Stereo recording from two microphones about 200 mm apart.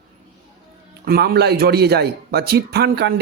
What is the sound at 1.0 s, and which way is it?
A man's voice, 50° right (ahead or behind).